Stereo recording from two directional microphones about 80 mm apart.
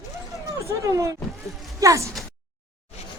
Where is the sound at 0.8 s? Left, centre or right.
Right.